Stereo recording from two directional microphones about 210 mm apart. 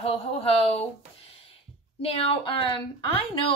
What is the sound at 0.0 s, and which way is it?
Speech, 25° left (ahead or behind).